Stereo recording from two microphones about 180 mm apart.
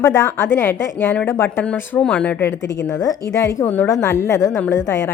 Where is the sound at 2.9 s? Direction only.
20° left (ahead or behind).